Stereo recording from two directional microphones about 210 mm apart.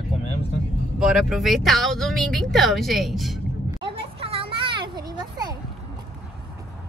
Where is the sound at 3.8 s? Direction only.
25° right (ahead or behind).